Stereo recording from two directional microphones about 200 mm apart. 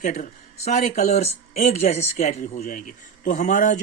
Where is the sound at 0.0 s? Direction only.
35° left (ahead or behind).